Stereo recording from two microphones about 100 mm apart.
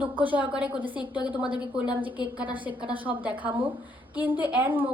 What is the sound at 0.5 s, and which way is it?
Speech, 15° right (ahead or behind).